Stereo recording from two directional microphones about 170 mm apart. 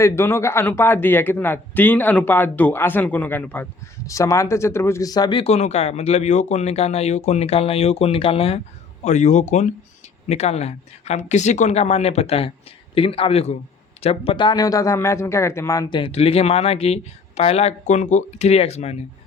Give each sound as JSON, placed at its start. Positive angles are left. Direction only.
{"t": 0.0, "sound": "a man's voice", "side_deg": 15}
{"t": 5.4, "sound": "a man's voice", "side_deg": 40}